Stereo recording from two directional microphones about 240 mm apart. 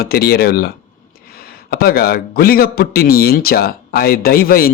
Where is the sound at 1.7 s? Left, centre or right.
Left.